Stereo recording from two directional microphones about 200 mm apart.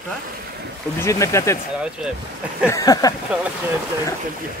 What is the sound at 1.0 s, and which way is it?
Speech, 15° left (ahead or behind).